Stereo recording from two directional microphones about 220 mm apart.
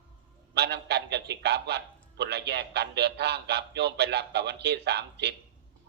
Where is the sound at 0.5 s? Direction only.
45° right (ahead or behind).